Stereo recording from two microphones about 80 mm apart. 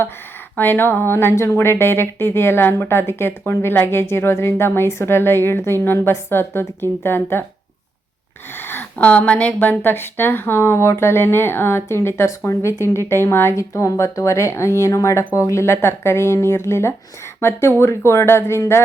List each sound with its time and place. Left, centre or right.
0.5 s speech: left
8.5 s speech: left